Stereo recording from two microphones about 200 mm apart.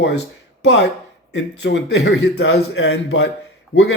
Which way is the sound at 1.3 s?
60° left (ahead or behind).